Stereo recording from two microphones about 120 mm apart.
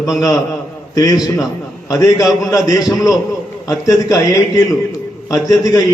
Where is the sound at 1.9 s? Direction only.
30° left (ahead or behind).